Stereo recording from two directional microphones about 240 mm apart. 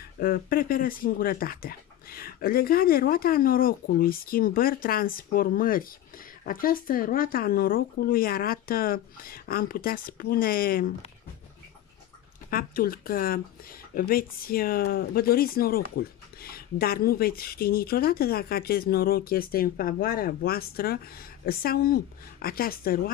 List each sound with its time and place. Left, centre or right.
0.2 s speech: left
12.4 s speech: left